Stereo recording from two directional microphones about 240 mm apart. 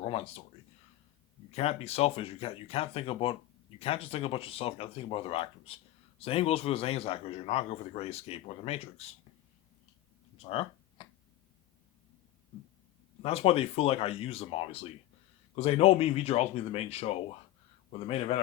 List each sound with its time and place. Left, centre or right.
0.0 s a man's voice: left
1.5 s a man's voice: left
10.3 s a sound: left
13.2 s a man's voice: left
18.3 s a man's voice: left